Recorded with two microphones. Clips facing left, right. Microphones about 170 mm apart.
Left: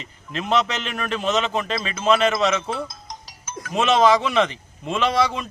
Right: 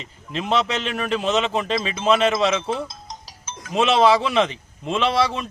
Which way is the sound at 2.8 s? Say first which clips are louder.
Even; 25° right (ahead or behind).